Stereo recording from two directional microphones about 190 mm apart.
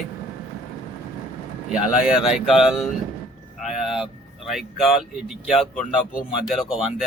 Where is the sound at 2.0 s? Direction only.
5° right (ahead or behind).